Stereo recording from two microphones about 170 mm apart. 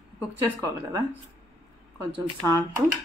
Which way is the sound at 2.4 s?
20° right (ahead or behind).